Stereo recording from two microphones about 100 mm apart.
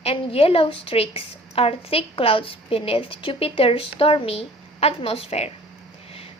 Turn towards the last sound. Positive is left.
turn(degrees=90)